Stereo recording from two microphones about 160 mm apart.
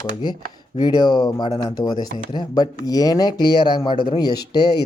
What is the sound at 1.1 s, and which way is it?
Speech, 25° left (ahead or behind).